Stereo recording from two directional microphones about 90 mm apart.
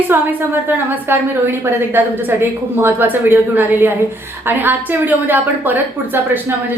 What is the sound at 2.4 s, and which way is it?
A woman's voice, 20° right (ahead or behind).